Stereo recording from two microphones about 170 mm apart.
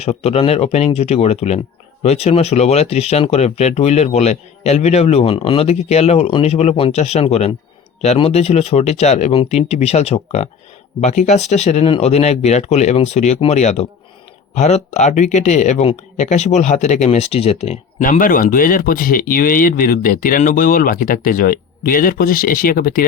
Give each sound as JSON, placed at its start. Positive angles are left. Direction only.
{"t": 0.0, "sound": "speech", "side_deg": 35}
{"t": 18.0, "sound": "speech", "side_deg": 55}